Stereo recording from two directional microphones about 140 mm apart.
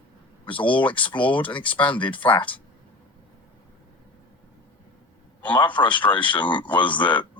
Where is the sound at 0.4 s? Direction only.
35° left (ahead or behind).